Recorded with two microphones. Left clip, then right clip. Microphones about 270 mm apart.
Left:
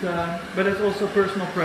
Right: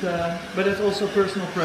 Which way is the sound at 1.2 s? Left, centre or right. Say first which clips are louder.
Left 1 dB; centre.